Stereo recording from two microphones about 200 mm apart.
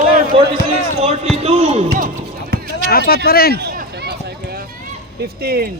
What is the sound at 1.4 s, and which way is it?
Speech, 30° right (ahead or behind).